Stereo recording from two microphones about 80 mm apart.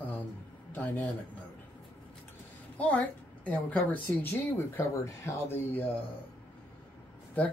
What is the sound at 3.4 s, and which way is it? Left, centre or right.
Speech, centre.